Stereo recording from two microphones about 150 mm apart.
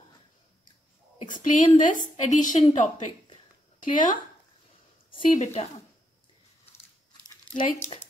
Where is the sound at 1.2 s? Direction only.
60° left (ahead or behind).